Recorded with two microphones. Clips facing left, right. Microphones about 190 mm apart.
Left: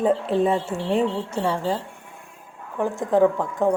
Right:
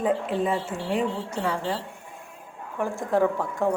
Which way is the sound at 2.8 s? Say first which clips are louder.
Left 4 dB; 20° left (ahead or behind).